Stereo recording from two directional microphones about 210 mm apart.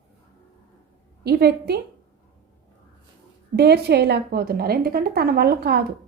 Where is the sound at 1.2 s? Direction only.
50° right (ahead or behind).